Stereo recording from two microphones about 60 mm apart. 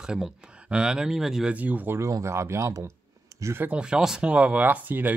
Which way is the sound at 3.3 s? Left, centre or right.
Right.